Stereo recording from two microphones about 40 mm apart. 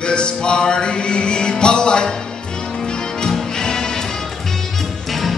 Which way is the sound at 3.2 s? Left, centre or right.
Centre.